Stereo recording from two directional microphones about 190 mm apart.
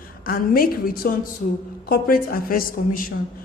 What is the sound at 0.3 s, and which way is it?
A woman's voice, 50° left (ahead or behind).